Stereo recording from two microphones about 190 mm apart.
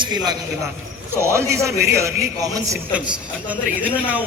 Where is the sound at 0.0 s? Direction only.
20° right (ahead or behind).